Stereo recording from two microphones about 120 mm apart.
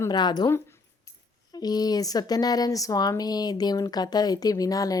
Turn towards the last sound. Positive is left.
turn(degrees=30)  # may be behind; listen again after turning